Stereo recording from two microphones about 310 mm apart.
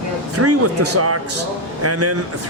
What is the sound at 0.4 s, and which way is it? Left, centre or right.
Speech, right.